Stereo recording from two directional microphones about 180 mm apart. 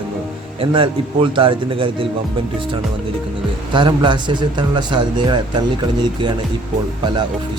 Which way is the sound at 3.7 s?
25° right (ahead or behind).